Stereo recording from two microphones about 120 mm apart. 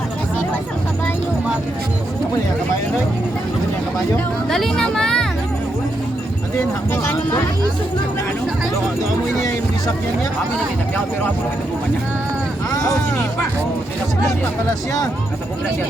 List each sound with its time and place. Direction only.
4.4 s speech: 5° left (ahead or behind)
6.9 s speech: 20° left (ahead or behind)
12.7 s speech: 30° left (ahead or behind)